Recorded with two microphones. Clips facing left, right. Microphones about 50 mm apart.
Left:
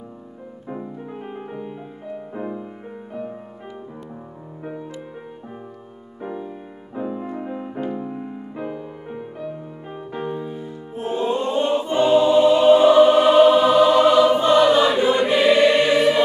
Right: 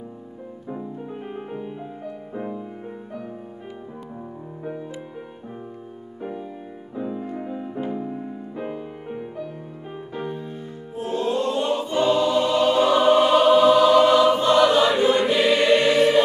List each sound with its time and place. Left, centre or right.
1.1 s music: centre
2.3 s music: centre
7.0 s music: centre
10.1 s music: centre
11.0 s choir: left
13.0 s choir: centre